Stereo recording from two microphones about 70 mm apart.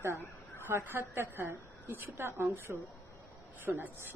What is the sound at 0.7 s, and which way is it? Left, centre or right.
A woman's voice, right.